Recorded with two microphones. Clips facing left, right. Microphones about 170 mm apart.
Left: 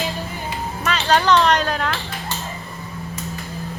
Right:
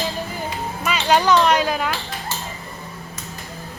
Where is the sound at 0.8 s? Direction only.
10° right (ahead or behind).